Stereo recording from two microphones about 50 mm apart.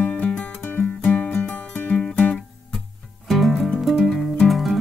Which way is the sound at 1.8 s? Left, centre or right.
Left.